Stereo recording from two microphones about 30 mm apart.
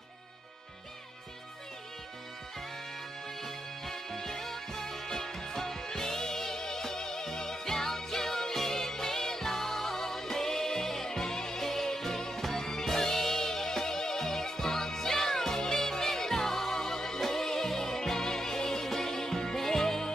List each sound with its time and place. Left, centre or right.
3.4 s music: centre